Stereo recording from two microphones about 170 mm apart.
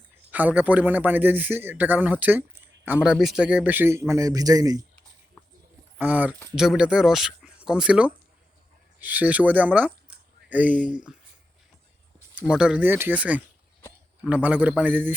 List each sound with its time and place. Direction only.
0.3 s a man's voice: 10° right (ahead or behind)
6.0 s a man's voice: 10° right (ahead or behind)
12.5 s a man's voice: 5° right (ahead or behind)